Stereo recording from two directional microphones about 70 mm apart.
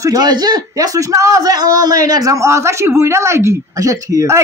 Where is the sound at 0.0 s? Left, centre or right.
Right.